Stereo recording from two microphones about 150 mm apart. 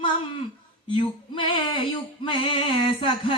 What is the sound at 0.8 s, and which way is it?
Male singing, 35° left (ahead or behind).